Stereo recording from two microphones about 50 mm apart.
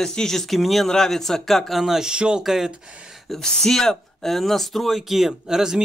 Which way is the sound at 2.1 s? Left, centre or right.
Centre.